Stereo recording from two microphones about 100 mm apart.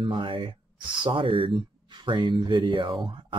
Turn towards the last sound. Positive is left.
turn(degrees=-55)  # may be behind; listen again after turning